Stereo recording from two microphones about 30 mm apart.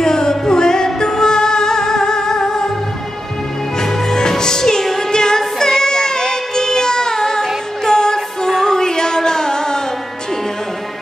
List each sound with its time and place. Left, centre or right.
0.0 s music: left
3.8 s music: centre